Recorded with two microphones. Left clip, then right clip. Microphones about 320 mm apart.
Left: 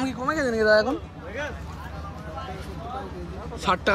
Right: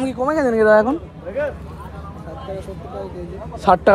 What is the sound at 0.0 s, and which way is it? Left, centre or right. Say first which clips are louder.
Speech: right 7 dB; centre.